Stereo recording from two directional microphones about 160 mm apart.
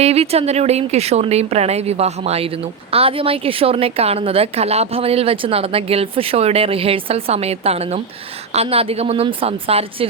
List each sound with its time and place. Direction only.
0.0 s speech: 40° right (ahead or behind)